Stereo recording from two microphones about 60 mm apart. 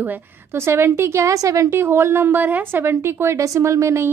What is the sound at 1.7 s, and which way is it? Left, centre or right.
A woman's voice, right.